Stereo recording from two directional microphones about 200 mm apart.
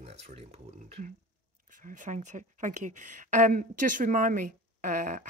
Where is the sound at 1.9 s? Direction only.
40° right (ahead or behind).